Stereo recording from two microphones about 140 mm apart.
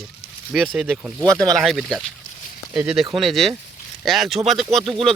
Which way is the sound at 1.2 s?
25° right (ahead or behind).